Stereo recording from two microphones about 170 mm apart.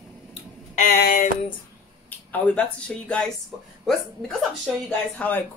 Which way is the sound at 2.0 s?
10° left (ahead or behind).